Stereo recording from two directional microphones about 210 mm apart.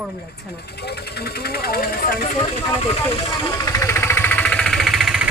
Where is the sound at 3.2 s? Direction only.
20° left (ahead or behind); by 5.3 s centre (ahead or behind).